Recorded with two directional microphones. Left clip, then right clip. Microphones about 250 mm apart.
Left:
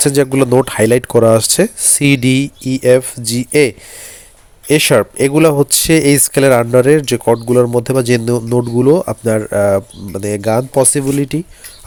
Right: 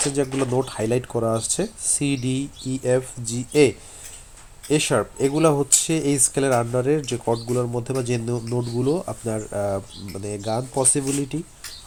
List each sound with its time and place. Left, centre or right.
0.1 s speech: left